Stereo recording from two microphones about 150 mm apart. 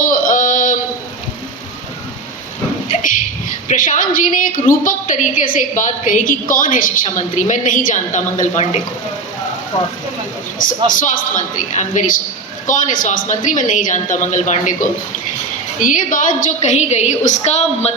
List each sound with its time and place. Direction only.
0.0 s a sound: 60° left (ahead or behind)
3.7 s a woman's voice: 60° left (ahead or behind)
10.9 s a woman's voice: 60° left (ahead or behind)